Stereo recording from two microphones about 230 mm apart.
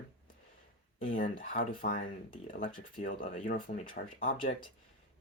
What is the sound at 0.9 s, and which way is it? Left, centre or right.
Speech, left.